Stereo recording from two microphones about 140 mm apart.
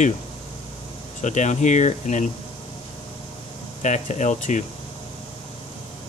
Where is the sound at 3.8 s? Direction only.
60° left (ahead or behind).